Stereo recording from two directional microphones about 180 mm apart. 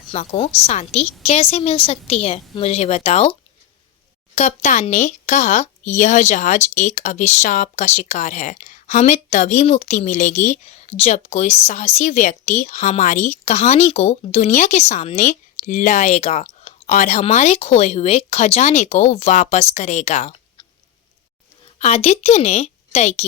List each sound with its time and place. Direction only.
0.1 s speech: 35° left (ahead or behind)
4.4 s speech: 40° left (ahead or behind)
21.8 s a woman's voice: 35° left (ahead or behind)